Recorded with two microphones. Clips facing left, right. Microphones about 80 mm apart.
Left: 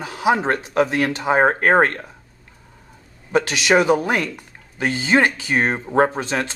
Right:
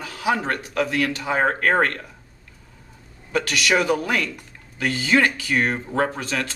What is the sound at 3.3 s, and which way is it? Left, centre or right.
Speech, left.